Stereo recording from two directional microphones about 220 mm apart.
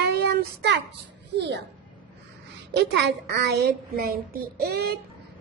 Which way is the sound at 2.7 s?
50° right (ahead or behind).